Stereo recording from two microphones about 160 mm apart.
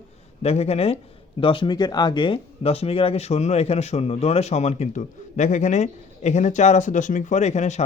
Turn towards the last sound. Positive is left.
turn(degrees=45)  # may be behind; listen again after turning